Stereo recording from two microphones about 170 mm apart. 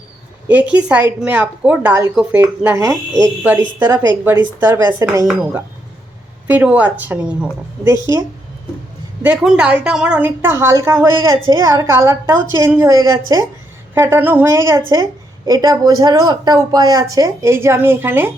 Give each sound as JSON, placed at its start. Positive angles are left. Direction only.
{"t": 0.4, "sound": "speech", "side_deg": -10}
{"t": 9.2, "sound": "a woman's voice", "side_deg": -5}